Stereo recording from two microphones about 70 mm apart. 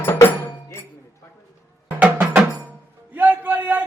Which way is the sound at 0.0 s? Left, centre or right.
Left.